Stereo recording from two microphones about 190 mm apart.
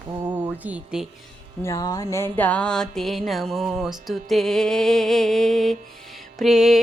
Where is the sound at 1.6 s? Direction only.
15° left (ahead or behind).